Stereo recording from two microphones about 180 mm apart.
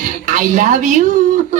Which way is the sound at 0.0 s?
45° right (ahead or behind).